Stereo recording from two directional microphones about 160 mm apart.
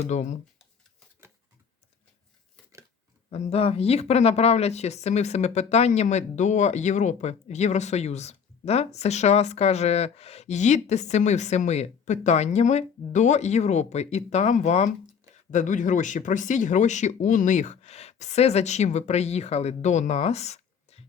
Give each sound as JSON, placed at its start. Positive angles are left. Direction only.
{"t": 0.0, "sound": "speech", "side_deg": 50}
{"t": 3.2, "sound": "speech", "side_deg": 40}